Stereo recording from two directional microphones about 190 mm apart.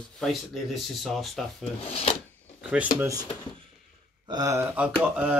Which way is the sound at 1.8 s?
35° left (ahead or behind).